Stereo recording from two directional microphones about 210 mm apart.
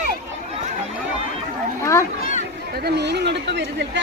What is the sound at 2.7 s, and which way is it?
Speech, 50° right (ahead or behind).